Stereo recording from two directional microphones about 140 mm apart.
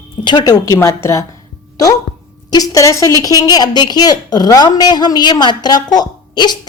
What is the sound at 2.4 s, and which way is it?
A woman's voice, 25° left (ahead or behind).